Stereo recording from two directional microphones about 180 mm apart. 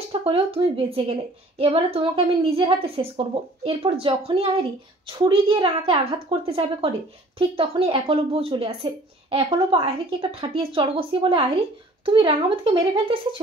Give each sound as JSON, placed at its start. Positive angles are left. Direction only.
{"t": 0.1, "sound": "a woman's voice", "side_deg": -30}